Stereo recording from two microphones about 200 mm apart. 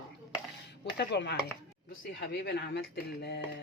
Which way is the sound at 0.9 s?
60° left (ahead or behind).